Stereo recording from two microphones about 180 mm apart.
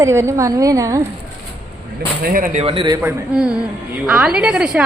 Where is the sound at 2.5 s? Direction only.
35° right (ahead or behind).